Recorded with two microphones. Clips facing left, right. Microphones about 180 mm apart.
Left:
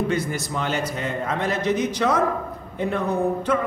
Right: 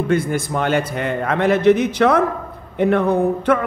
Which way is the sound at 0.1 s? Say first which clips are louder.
Right 6 dB; 55° right (ahead or behind).